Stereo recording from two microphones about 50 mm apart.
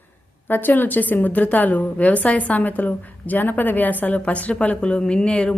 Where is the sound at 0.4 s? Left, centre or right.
Left.